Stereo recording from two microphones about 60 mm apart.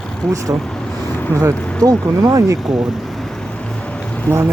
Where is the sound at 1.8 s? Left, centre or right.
Right.